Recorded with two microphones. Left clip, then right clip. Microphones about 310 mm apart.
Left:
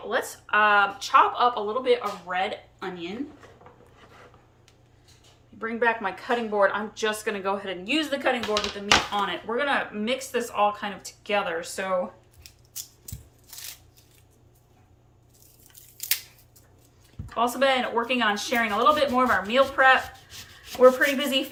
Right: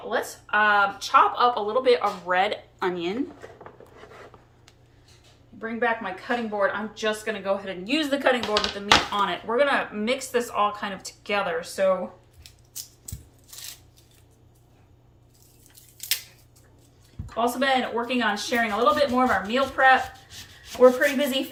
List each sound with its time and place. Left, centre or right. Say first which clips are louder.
0.1 s speech: even; centre
5.5 s speech: left 1 dB; centre
12.4 s scissors: even; centre
17.3 s speech: even; centre
20.3 s rub: even; centre
20.7 s speech: even; centre